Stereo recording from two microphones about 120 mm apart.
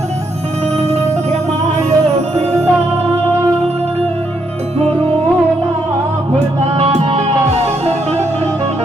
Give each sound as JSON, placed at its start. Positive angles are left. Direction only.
{"t": 0.8, "sound": "music", "side_deg": -65}
{"t": 6.7, "sound": "music", "side_deg": -60}